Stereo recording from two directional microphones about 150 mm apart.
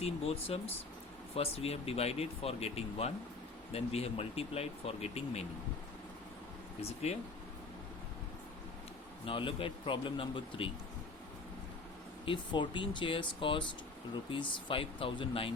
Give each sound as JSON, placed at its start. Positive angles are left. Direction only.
{"t": 0.0, "sound": "speech", "side_deg": 40}
{"t": 6.8, "sound": "speech", "side_deg": 45}
{"t": 9.2, "sound": "speech", "side_deg": 35}
{"t": 12.2, "sound": "speech", "side_deg": 30}